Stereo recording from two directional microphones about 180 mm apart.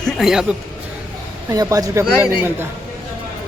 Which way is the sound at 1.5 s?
20° right (ahead or behind).